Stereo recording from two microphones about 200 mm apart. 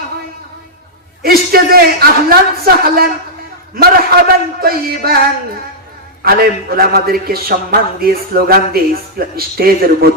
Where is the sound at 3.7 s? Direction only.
50° right (ahead or behind).